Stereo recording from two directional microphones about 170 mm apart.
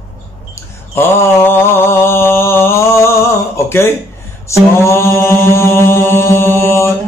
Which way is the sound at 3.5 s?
15° left (ahead or behind).